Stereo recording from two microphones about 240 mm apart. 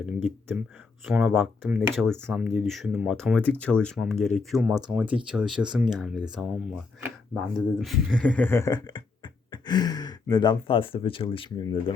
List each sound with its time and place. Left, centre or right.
0.0 s speech: centre; by 11.8 s left